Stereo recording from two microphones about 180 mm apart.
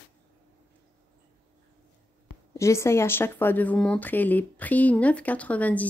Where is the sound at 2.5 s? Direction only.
15° left (ahead or behind).